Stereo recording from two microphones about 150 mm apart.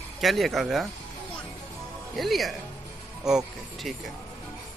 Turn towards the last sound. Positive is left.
turn(degrees=-5)  # may be behind; listen again after turning